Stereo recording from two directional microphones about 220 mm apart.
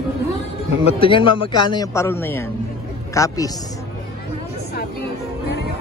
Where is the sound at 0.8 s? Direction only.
25° left (ahead or behind).